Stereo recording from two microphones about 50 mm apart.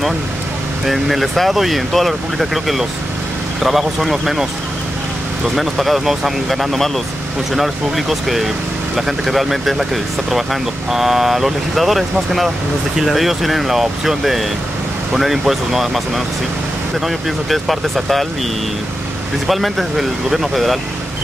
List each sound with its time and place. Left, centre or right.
0.8 s speech: centre
5.6 s speech: centre
17.0 s speech: centre
19.4 s speech: centre